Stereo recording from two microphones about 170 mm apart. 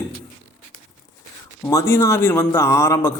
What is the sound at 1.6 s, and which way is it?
Speech, 15° left (ahead or behind).